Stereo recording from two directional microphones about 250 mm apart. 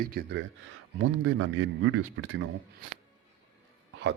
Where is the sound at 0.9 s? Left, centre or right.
Right.